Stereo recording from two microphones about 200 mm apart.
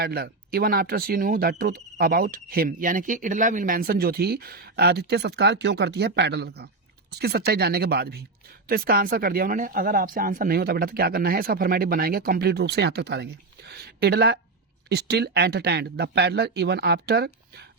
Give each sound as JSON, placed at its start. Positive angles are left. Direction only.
{"t": 0.0, "sound": "speech", "side_deg": -50}